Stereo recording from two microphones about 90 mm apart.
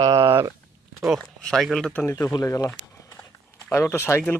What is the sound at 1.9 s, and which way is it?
Speech, 20° left (ahead or behind).